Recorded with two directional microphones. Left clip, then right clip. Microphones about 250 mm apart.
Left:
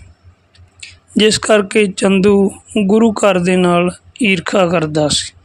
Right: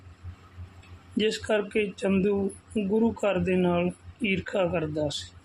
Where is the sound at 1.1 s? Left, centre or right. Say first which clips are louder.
Left 15 dB; left.